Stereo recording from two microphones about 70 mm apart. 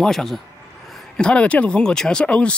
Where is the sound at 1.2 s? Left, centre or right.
Centre.